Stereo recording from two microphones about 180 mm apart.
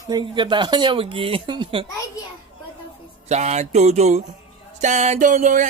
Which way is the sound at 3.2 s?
40° right (ahead or behind).